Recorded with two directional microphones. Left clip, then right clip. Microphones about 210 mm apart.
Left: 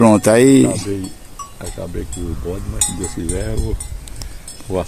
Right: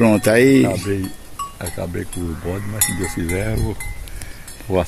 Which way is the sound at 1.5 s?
60° right (ahead or behind).